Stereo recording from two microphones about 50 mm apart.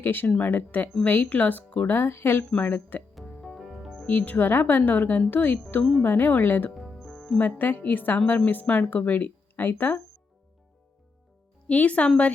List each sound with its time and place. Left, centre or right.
0.0 s speech: left
2.6 s speech: left
3.2 s music: centre
4.0 s speech: left
6.7 s music: centre
7.6 s speech: left
11.7 s a woman's voice: left